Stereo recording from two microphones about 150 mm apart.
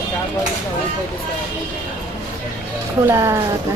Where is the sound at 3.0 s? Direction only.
20° right (ahead or behind).